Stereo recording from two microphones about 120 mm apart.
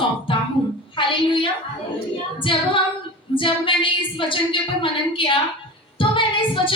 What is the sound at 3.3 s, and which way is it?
A woman's voice, 45° left (ahead or behind).